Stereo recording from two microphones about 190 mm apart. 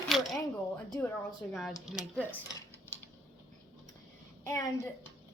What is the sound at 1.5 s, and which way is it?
Speech, centre (ahead or behind).